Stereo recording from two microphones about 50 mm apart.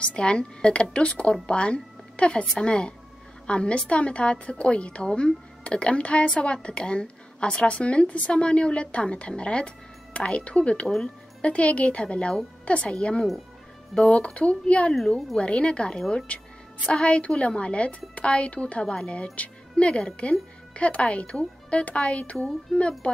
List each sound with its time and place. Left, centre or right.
0.0 s a woman's voice: left